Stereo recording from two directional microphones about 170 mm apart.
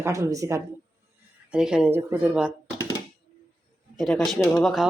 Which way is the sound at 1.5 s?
5° right (ahead or behind).